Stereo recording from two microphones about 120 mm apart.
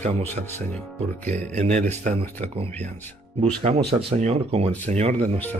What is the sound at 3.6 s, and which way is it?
Speech, 60° right (ahead or behind).